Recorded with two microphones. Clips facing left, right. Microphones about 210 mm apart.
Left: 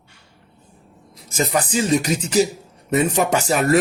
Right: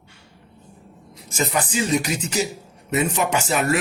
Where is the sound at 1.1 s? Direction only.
35° left (ahead or behind).